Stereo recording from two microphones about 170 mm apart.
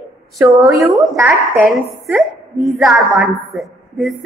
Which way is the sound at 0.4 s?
20° right (ahead or behind).